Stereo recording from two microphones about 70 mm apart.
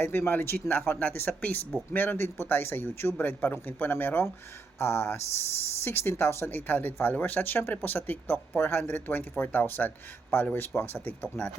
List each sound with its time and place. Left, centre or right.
0.0 s speech: left